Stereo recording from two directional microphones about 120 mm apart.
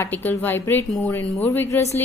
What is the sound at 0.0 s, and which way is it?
A woman's voice, 15° left (ahead or behind).